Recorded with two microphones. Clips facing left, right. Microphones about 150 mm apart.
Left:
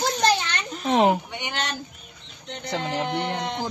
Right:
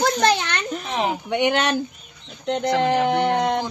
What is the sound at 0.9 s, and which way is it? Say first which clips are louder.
Speech: left 6 dB; 50° left (ahead or behind).